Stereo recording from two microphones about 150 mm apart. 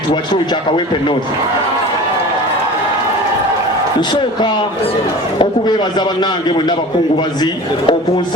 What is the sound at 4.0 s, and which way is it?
Speech, 30° left (ahead or behind).